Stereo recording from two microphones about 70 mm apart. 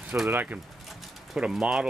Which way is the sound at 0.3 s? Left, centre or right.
Right.